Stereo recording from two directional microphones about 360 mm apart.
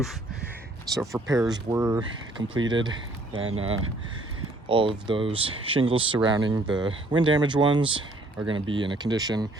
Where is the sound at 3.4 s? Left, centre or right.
Right.